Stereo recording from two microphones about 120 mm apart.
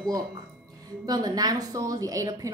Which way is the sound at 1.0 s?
35° right (ahead or behind).